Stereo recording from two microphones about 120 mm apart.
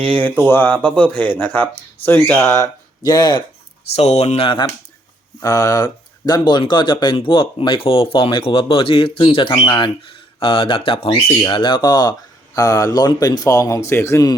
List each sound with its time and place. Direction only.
0.0 s speech: 10° left (ahead or behind)
2.4 s a man's voice: 25° left (ahead or behind)
3.9 s speech: 60° left (ahead or behind)
5.4 s a man's voice: 30° left (ahead or behind)